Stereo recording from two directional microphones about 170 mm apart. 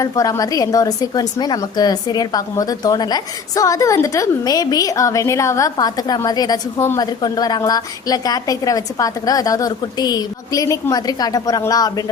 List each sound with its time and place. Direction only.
0.0 s a woman's voice: 20° left (ahead or behind)